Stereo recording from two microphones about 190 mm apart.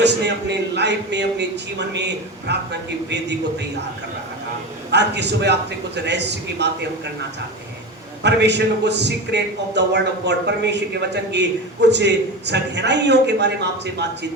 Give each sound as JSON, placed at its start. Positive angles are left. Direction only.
{"t": 0.0, "sound": "a man's voice", "side_deg": -65}
{"t": 4.9, "sound": "a man's voice", "side_deg": -65}
{"t": 8.2, "sound": "a man's voice", "side_deg": -65}